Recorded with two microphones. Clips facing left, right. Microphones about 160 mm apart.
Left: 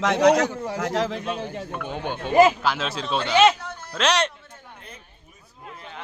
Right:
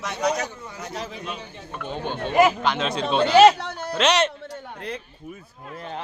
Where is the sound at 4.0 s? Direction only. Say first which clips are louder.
Right 2 dB; centre (ahead or behind).